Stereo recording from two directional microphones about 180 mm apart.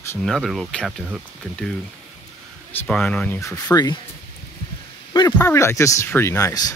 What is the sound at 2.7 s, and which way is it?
Speech, 10° left (ahead or behind).